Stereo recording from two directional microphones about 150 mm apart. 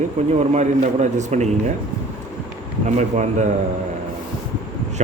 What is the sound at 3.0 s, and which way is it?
Speech, 50° right (ahead or behind).